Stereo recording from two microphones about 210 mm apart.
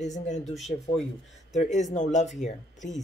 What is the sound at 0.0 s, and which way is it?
Speech, 35° left (ahead or behind).